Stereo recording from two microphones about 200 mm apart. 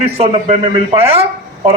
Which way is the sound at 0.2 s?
30° right (ahead or behind).